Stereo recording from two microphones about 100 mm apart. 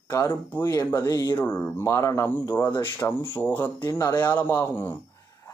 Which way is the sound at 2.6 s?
50° left (ahead or behind).